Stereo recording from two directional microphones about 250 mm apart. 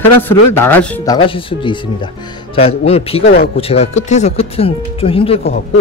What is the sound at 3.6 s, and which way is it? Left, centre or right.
Speech, left.